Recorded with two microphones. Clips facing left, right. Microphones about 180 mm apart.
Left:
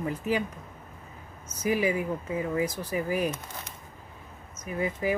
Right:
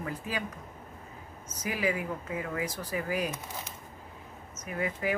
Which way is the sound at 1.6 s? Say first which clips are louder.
Left 5 dB; 25° left (ahead or behind).